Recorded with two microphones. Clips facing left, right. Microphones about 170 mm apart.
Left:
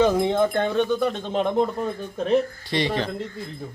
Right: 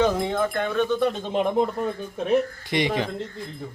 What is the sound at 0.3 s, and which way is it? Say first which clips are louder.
Speech: left 3 dB; 30° left (ahead or behind).